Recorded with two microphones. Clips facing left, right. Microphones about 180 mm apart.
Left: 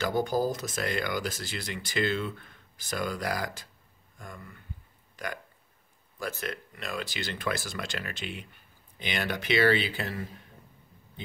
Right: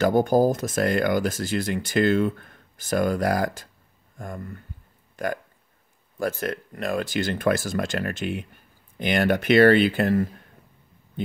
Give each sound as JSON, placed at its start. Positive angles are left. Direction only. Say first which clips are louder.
{"t": 0.0, "sound": "speech", "louder": "right 8 dB", "side_deg": -50}